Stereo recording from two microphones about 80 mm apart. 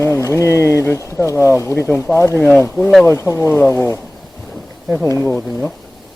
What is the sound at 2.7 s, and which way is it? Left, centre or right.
Speech, centre.